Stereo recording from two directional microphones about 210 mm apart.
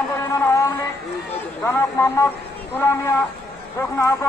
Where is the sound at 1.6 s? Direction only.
10° left (ahead or behind).